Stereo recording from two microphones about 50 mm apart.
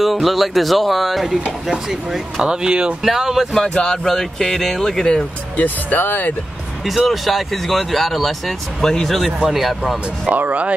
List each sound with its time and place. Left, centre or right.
0.0 s speech: centre
2.5 s speech: centre
3.0 s speech: centre
3.6 s speech: centre
5.6 s speech: left
7.1 s speech: centre
9.5 s speech: centre
10.2 s speech: right